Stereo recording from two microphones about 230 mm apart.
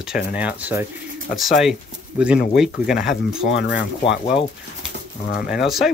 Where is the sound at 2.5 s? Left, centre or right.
Centre.